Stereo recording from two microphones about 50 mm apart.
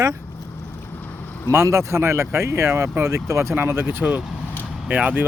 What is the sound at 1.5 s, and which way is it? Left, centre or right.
Speech, right.